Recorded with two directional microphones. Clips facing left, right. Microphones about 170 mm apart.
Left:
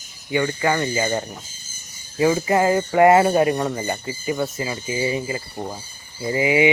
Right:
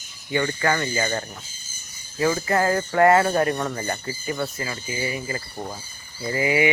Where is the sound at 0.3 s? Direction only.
10° left (ahead or behind).